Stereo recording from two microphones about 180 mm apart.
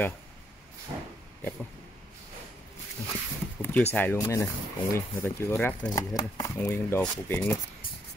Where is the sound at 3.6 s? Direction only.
10° left (ahead or behind).